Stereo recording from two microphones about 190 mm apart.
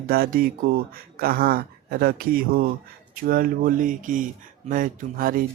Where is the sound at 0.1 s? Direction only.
50° right (ahead or behind).